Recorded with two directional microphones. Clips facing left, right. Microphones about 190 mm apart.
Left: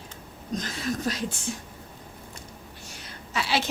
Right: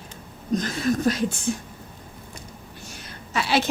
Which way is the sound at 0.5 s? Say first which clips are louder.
Right 7 dB; 50° right (ahead or behind).